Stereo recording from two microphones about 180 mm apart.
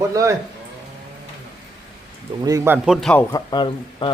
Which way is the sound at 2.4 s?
15° right (ahead or behind).